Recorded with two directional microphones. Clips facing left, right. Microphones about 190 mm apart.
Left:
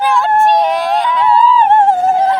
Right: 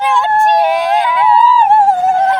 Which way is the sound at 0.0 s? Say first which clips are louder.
Even; centre (ahead or behind).